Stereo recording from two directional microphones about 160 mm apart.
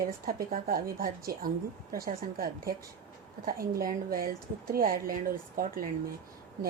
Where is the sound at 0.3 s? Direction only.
65° right (ahead or behind).